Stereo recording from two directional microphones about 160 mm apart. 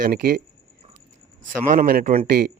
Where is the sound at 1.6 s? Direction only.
60° right (ahead or behind).